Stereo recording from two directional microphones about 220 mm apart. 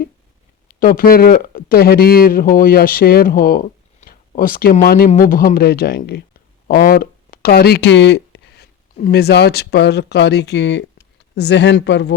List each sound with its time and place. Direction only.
0.7 s speech: 40° left (ahead or behind)